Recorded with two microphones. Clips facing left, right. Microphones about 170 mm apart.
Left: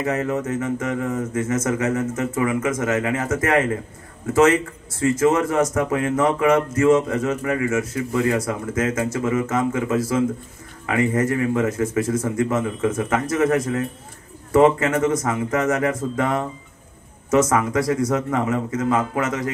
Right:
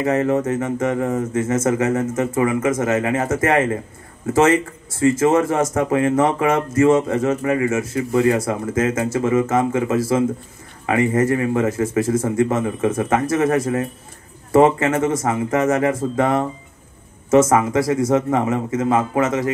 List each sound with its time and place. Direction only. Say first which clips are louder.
0.0 s speech: right 5 dB; 30° right (ahead or behind)